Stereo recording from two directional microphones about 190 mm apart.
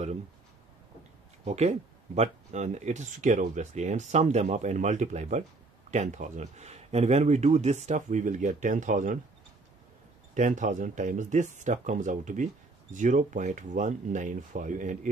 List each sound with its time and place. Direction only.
1.4 s speech: 35° right (ahead or behind)
10.3 s speech: 40° right (ahead or behind)